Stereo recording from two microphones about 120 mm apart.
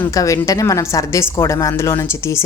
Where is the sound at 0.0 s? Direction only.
25° left (ahead or behind).